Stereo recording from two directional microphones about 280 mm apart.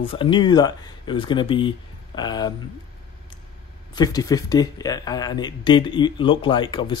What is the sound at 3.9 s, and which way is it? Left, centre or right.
Speech, centre.